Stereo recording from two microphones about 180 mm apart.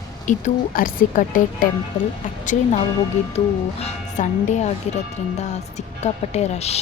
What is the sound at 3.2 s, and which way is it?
Speech, 40° left (ahead or behind).